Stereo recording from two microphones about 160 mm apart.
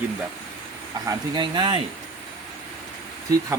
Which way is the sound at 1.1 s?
30° right (ahead or behind).